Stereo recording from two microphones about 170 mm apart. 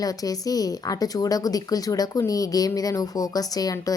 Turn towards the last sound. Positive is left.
turn(degrees=20)  # may be behind; listen again after turning